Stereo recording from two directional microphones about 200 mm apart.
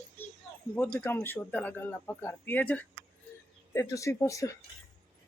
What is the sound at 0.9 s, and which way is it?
Speech, 10° left (ahead or behind).